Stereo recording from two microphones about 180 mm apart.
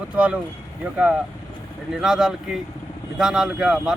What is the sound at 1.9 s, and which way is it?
Speech, 5° right (ahead or behind).